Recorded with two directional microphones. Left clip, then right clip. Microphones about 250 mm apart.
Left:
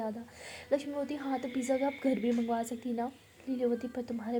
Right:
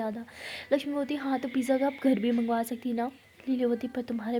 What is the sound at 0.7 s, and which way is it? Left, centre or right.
A woman's voice, right.